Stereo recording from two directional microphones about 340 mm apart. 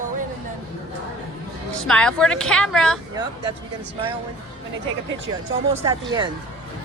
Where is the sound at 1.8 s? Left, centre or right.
Centre.